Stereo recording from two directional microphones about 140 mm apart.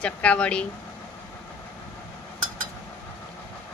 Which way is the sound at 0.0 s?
10° left (ahead or behind).